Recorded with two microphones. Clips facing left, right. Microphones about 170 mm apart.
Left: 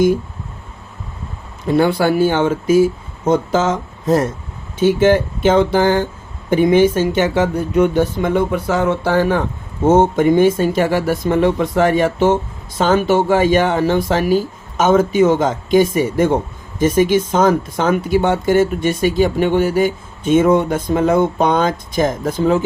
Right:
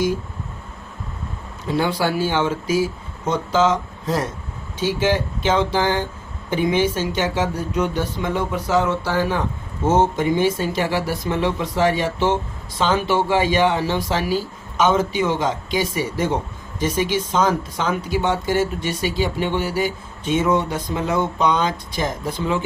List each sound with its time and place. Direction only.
1.7 s speech: 55° left (ahead or behind)